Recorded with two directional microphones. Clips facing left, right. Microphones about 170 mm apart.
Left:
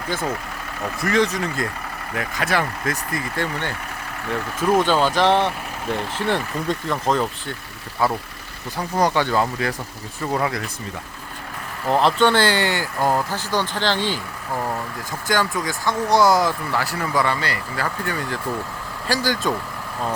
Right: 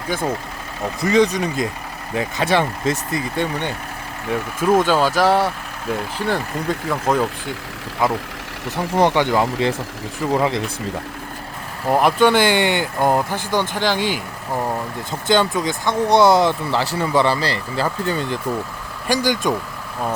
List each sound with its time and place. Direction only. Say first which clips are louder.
0.1 s speech: right 3 dB; 10° right (ahead or behind)
11.9 s speech: right 2 dB; 10° right (ahead or behind)
15.3 s speech: right 5 dB; 25° right (ahead or behind)